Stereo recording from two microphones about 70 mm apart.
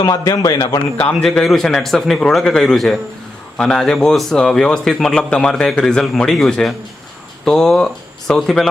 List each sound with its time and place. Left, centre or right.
0.0 s a man's voice: left
1.2 s a man's voice: centre